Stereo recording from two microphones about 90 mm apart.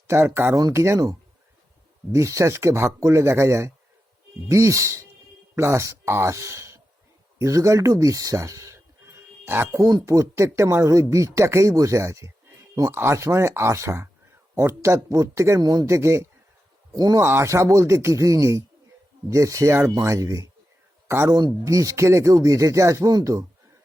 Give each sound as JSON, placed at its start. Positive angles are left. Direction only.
{"t": 0.1, "sound": "speech", "side_deg": -25}
{"t": 0.5, "sound": "speech", "side_deg": -40}
{"t": 2.1, "sound": "speech", "side_deg": -35}
{"t": 9.5, "sound": "speech", "side_deg": -25}
{"t": 9.8, "sound": "speech", "side_deg": -40}
{"t": 16.9, "sound": "speech", "side_deg": -45}
{"t": 17.2, "sound": "speech", "side_deg": -30}